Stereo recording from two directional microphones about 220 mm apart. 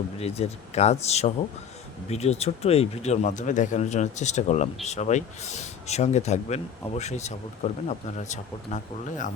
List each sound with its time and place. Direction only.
0.2 s speech: 30° left (ahead or behind)